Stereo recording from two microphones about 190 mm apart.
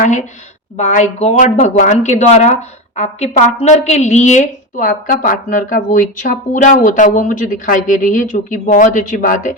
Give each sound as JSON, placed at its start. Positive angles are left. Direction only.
{"t": 0.0, "sound": "speech", "side_deg": 40}